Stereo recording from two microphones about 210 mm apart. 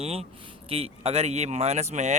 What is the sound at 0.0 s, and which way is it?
Speech, 30° right (ahead or behind).